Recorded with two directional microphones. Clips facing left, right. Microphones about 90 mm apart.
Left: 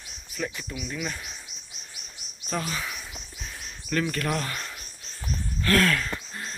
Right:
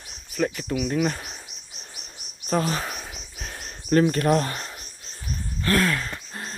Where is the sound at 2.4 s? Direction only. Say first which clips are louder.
Right 6 dB; 45° right (ahead or behind).